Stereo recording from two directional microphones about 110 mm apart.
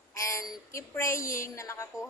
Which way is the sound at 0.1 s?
30° left (ahead or behind).